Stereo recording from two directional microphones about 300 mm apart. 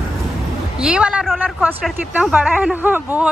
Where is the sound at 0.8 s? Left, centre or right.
Centre.